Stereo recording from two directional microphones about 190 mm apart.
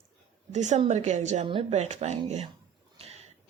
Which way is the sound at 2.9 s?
35° right (ahead or behind).